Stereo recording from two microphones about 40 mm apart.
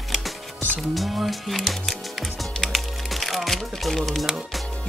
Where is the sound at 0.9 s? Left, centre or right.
Centre.